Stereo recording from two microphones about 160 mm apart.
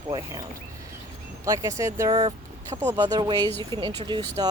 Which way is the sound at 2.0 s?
30° right (ahead or behind).